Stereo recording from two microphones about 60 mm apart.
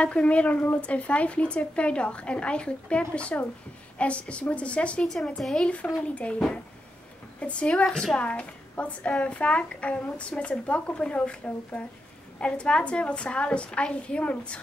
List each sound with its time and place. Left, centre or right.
0.0 s speech: centre
5.0 s a woman's voice: centre